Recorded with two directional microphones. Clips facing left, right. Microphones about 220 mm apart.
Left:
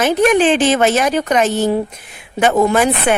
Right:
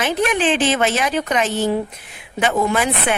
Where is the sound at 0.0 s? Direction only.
45° left (ahead or behind).